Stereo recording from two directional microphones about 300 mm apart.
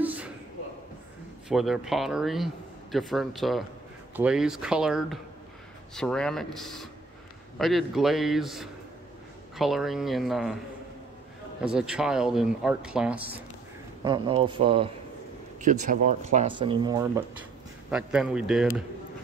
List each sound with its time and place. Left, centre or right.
0.0 s a sound: centre
1.5 s a man's voice: centre
11.6 s a man's voice: centre
14.0 s speech: centre
17.9 s a man's voice: centre